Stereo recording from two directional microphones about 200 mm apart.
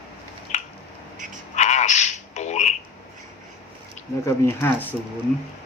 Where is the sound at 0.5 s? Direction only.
35° left (ahead or behind).